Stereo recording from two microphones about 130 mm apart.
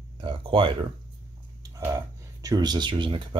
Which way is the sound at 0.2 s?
40° right (ahead or behind).